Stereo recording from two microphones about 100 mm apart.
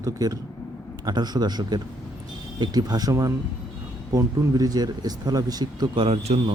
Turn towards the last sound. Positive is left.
turn(degrees=-90)